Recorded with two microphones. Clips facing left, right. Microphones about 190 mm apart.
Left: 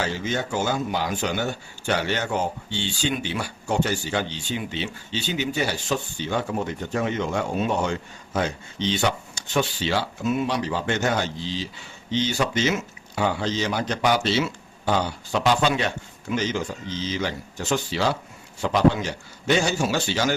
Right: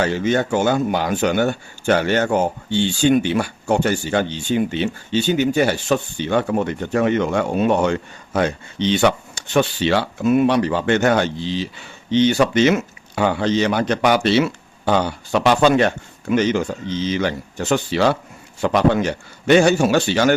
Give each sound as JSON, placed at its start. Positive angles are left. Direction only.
{"t": 0.0, "sound": "speech", "side_deg": -60}